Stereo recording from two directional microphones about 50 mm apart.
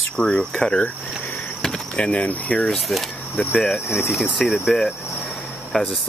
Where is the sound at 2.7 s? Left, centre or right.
Centre.